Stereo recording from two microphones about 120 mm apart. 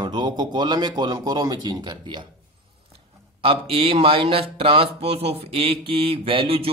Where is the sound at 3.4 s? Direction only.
50° right (ahead or behind).